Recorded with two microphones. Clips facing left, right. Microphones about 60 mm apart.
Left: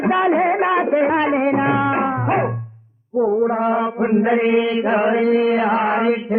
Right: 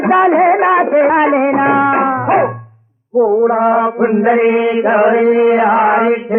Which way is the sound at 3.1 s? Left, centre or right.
Centre.